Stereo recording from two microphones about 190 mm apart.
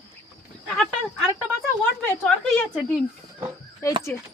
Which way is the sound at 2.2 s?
Centre (ahead or behind).